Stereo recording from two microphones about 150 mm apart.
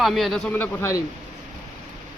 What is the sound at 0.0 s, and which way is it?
Speech, centre (ahead or behind).